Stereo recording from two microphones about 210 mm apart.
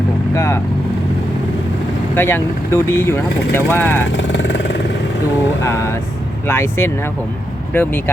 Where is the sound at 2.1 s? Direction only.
10° left (ahead or behind).